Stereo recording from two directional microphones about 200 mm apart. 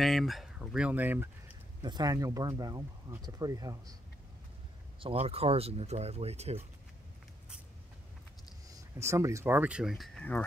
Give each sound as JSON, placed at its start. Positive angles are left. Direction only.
{"t": 0.0, "sound": "speech", "side_deg": 0}
{"t": 1.8, "sound": "speech", "side_deg": -20}
{"t": 5.0, "sound": "speech", "side_deg": -30}
{"t": 9.0, "sound": "speech", "side_deg": -15}